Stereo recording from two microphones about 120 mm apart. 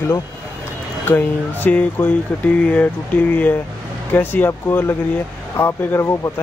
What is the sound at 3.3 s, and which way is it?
Speech, 15° left (ahead or behind).